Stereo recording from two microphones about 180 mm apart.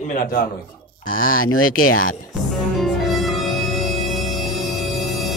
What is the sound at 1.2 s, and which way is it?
Speech, 50° left (ahead or behind).